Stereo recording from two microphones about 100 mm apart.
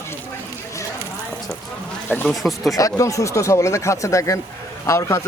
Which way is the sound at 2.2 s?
Centre (ahead or behind).